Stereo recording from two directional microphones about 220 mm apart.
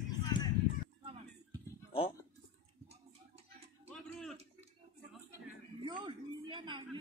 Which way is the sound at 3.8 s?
Centre (ahead or behind).